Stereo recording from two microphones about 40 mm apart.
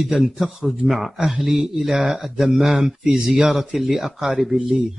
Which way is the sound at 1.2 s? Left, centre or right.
Centre.